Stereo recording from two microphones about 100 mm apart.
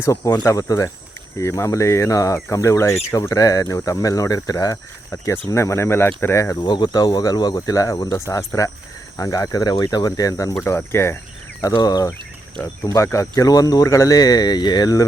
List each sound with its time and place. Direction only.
0.0 s speech: 30° left (ahead or behind)
6.6 s speech: 50° left (ahead or behind); by 11.2 s 25° left (ahead or behind)
11.6 s speech: 40° left (ahead or behind)